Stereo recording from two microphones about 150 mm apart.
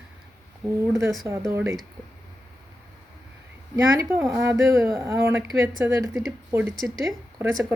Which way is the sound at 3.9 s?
15° right (ahead or behind).